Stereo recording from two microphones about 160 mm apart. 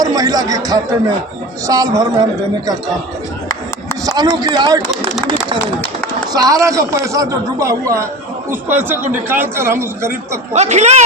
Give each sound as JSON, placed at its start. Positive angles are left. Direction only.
{"t": 0.0, "sound": "a man's voice", "side_deg": -25}
{"t": 4.0, "sound": "a man's voice", "side_deg": -25}
{"t": 6.3, "sound": "a man's voice", "side_deg": -20}
{"t": 10.1, "sound": "speech", "side_deg": -45}